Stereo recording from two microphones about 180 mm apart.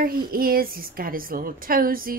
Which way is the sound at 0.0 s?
55° right (ahead or behind).